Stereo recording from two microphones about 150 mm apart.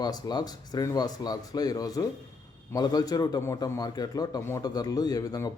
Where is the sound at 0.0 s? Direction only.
25° left (ahead or behind).